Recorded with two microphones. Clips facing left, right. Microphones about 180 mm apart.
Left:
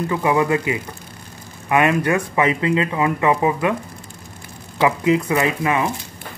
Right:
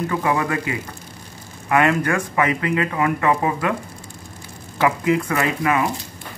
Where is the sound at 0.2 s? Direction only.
20° left (ahead or behind).